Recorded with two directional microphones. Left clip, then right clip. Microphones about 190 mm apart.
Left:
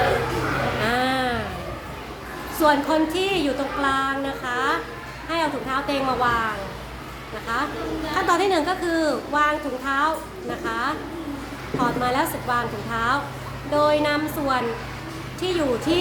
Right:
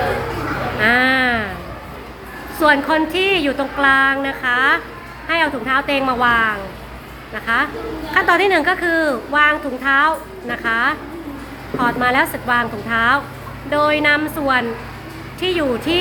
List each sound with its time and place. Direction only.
0.9 s a sound: 15° right (ahead or behind)
2.6 s a child's voice: 15° right (ahead or behind)
7.4 s a woman's voice: 20° right (ahead or behind)